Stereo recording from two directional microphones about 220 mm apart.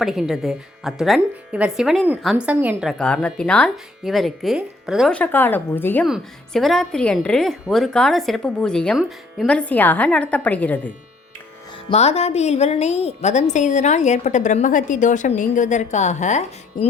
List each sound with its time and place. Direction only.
0.0 s a woman's voice: centre (ahead or behind)
3.0 s a woman's voice: 5° left (ahead or behind)
11.9 s a woman's voice: 30° left (ahead or behind)